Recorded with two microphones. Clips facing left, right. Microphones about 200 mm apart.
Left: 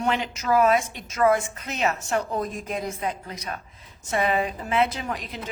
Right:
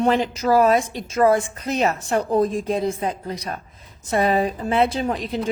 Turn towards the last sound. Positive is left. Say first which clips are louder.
# right 8 dB
turn(degrees=-30)  # may be behind; listen again after turning